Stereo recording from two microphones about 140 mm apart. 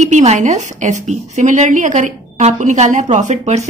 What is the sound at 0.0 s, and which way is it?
A woman's voice, 55° right (ahead or behind).